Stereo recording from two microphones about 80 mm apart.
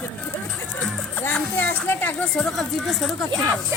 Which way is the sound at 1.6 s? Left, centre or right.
Left.